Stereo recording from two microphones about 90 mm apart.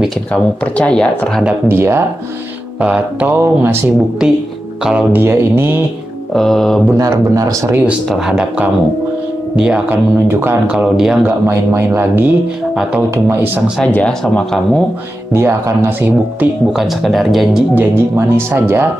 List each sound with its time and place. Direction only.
0.3 s speech: 10° left (ahead or behind)
1.7 s speech: 25° right (ahead or behind)
2.8 s speech: 15° right (ahead or behind)
5.1 s speech: 25° right (ahead or behind)
6.3 s speech: 5° left (ahead or behind)
7.0 s speech: 40° right (ahead or behind)
8.3 s speech: 10° right (ahead or behind)
9.8 s speech: 25° right (ahead or behind)
10.7 s speech: 10° right (ahead or behind)
11.2 s speech: 25° right (ahead or behind)
13.7 s speech: 10° left (ahead or behind)
15.3 s speech: 30° right (ahead or behind)
16.7 s speech: centre (ahead or behind)
17.7 s speech: 25° right (ahead or behind)